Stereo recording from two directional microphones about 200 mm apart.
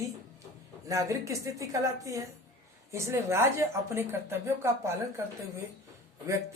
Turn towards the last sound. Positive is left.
turn(degrees=-15)  # may be behind; listen again after turning